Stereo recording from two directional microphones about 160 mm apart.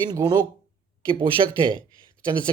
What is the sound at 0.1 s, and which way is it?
A man's voice, 25° right (ahead or behind).